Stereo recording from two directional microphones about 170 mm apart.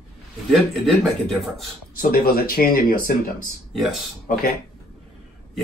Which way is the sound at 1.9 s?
60° left (ahead or behind).